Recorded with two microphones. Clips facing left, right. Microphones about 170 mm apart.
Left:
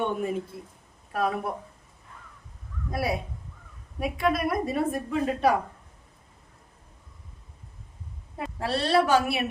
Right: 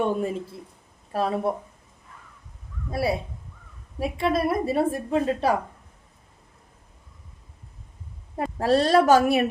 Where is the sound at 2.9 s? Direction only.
30° right (ahead or behind).